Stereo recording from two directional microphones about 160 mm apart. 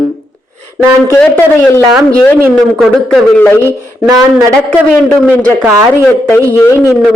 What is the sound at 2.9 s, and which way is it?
Speech, 5° left (ahead or behind).